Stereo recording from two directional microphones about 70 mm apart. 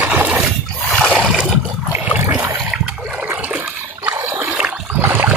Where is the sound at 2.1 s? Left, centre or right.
Centre.